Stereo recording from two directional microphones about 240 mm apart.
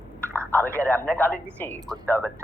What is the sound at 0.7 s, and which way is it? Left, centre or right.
Speech, centre.